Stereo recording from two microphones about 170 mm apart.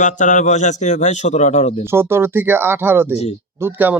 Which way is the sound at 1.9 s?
15° right (ahead or behind).